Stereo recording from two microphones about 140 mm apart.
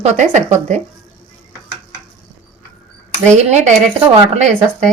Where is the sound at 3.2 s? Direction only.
55° right (ahead or behind).